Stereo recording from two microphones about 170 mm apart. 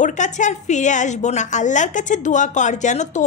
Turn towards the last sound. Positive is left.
turn(degrees=45)  # may be behind; listen again after turning